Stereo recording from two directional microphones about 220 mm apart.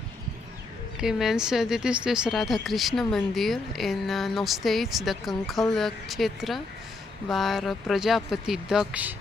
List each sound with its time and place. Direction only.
1.0 s speech: centre (ahead or behind)